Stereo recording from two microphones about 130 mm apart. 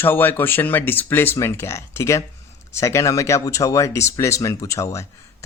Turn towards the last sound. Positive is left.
turn(degrees=25)  # may be behind; listen again after turning